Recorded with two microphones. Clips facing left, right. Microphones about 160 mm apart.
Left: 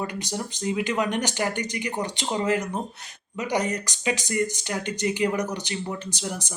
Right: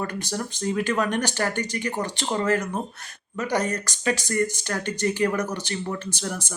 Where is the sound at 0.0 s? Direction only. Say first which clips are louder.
Right 1 dB; 15° left (ahead or behind).